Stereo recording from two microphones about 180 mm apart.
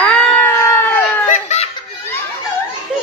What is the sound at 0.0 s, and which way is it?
Cat, 5° left (ahead or behind).